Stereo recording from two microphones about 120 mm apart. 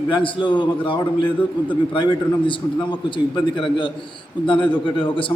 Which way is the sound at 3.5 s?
40° left (ahead or behind).